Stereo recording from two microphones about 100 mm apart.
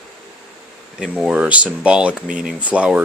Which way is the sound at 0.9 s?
5° right (ahead or behind).